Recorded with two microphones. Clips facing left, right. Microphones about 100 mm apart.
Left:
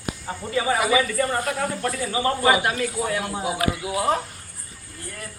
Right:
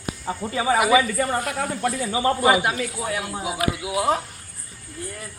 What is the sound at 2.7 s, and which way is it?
A man's voice, 5° right (ahead or behind).